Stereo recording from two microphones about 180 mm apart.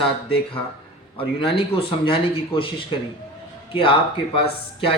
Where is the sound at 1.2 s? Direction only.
30° left (ahead or behind).